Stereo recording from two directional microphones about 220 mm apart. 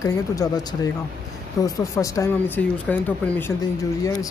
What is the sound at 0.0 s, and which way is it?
Speech, 15° left (ahead or behind).